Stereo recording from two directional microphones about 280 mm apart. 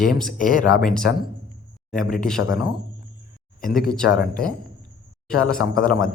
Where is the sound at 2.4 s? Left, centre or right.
Left.